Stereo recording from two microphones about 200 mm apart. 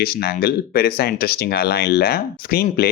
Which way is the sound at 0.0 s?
50° left (ahead or behind).